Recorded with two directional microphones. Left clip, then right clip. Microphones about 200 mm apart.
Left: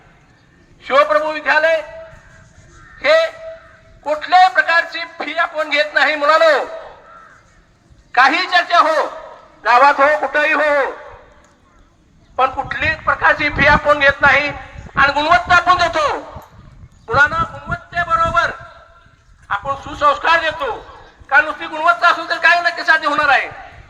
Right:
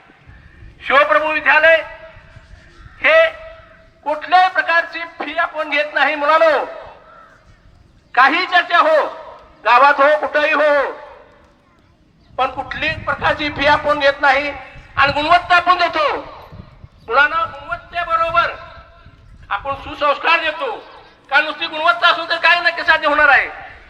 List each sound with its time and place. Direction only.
0.9 s a man's voice: 40° left (ahead or behind)
3.0 s a man's voice: 45° left (ahead or behind)
8.1 s a man's voice: 55° left (ahead or behind)
12.4 s a man's voice: 30° left (ahead or behind); by 16.2 s 10° left (ahead or behind)
17.1 s a sound: centre (ahead or behind)
19.5 s a man's voice: 5° left (ahead or behind); by 20.7 s 20° left (ahead or behind)
21.2 s a man's voice: 35° left (ahead or behind); by 23.5 s 60° left (ahead or behind)